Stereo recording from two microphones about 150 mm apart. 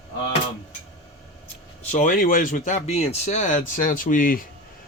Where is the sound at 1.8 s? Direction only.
60° left (ahead or behind).